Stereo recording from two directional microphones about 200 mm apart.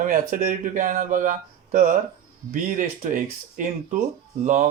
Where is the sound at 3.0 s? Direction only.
40° right (ahead or behind).